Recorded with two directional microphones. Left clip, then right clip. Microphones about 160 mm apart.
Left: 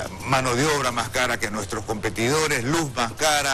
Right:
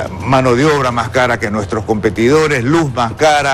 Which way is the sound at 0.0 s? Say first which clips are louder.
Right 10 dB; 10° right (ahead or behind).